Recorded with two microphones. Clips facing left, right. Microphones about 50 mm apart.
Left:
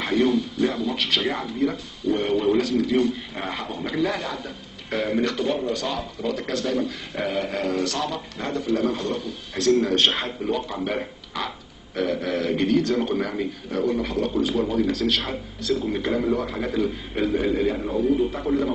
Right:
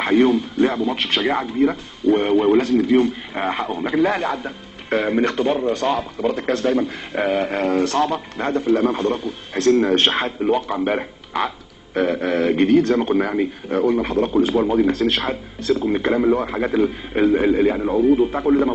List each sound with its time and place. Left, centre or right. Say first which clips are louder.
0.0 s speech: right 5 dB; right